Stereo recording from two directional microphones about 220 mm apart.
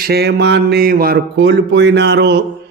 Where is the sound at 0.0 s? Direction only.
45° right (ahead or behind).